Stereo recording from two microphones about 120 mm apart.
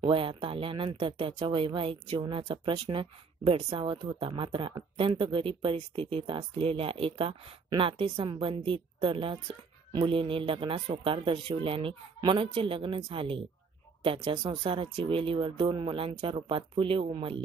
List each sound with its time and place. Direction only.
0.0 s speech: 45° right (ahead or behind)